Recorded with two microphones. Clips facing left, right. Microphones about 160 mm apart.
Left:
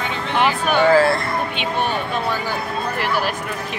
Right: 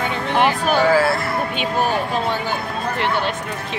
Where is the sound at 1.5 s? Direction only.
40° right (ahead or behind).